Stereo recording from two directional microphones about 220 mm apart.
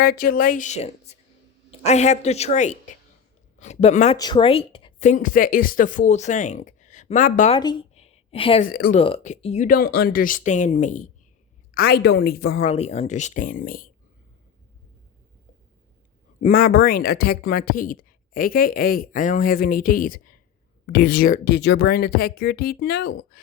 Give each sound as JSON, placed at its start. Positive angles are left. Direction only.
{"t": 0.0, "sound": "speech", "side_deg": 45}
{"t": 7.5, "sound": "a sound", "side_deg": 20}
{"t": 8.6, "sound": "speech", "side_deg": 40}
{"t": 9.0, "sound": "speech", "side_deg": 25}
{"t": 11.7, "sound": "speech", "side_deg": 45}
{"t": 12.6, "sound": "speech", "side_deg": 30}
{"t": 16.4, "sound": "speech", "side_deg": 40}